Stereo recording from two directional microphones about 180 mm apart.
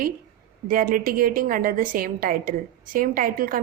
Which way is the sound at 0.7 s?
50° right (ahead or behind).